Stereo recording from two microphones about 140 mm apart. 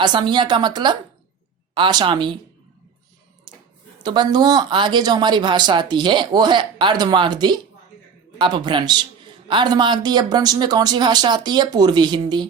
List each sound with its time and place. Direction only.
0.0 s speech: 35° right (ahead or behind)
4.0 s speech: 30° right (ahead or behind)